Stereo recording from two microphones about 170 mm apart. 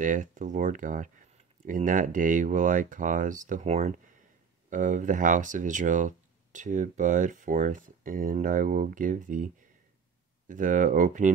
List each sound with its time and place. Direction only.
0.0 s speech: 50° right (ahead or behind)
10.5 s speech: 50° right (ahead or behind)